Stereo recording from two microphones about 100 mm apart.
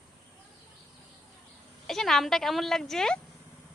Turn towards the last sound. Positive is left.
turn(degrees=5)  # may be behind; listen again after turning